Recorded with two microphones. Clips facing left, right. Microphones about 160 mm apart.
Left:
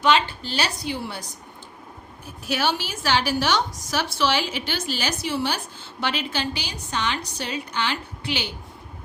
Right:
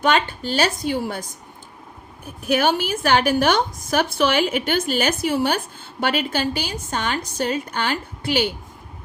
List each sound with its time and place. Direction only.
0.0 s a woman's voice: 50° right (ahead or behind)